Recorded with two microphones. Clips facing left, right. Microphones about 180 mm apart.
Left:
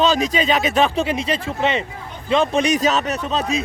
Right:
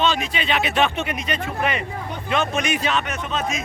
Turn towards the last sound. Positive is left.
turn(degrees=35)  # may be behind; listen again after turning